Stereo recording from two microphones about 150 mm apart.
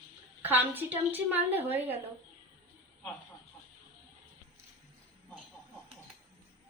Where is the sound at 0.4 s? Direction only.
15° right (ahead or behind).